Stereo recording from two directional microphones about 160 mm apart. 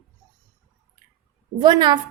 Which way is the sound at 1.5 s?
25° right (ahead or behind).